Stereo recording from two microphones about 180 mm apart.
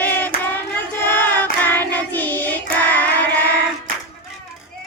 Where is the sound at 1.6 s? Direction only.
10° left (ahead or behind).